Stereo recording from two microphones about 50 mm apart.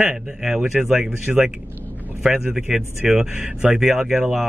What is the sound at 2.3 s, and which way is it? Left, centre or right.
Speech, right.